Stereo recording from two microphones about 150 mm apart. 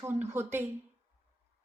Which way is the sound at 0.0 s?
15° right (ahead or behind).